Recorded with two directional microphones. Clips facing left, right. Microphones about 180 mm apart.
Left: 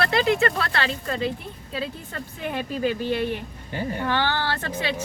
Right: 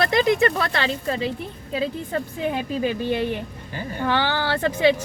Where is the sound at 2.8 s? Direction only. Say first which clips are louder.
Even; 20° right (ahead or behind).